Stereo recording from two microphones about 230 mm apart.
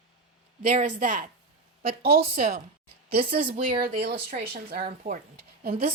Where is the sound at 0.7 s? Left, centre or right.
Right.